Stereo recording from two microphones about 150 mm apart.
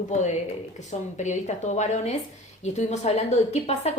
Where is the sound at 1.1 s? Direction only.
50° left (ahead or behind).